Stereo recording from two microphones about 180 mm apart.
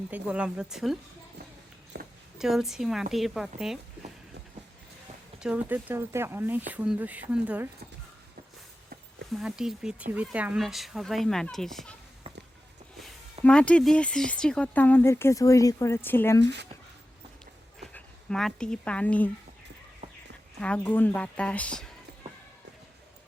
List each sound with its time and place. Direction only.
0.1 s speech: 5° right (ahead or behind)
1.9 s a sound: 70° right (ahead or behind)
2.4 s speech: centre (ahead or behind)
5.4 s speech: 5° right (ahead or behind)
9.3 s speech: 5° right (ahead or behind)
13.4 s speech: 5° left (ahead or behind)
17.4 s a sound: 5° left (ahead or behind)
20.0 s a sound: 40° right (ahead or behind)
20.6 s speech: 5° left (ahead or behind)